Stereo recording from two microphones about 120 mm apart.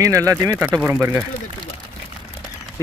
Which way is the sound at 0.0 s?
25° right (ahead or behind).